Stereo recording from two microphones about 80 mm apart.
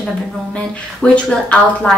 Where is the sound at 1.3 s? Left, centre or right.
Centre.